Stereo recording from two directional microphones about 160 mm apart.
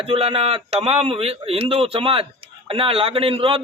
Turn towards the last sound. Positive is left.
turn(degrees=-35)  # may be behind; listen again after turning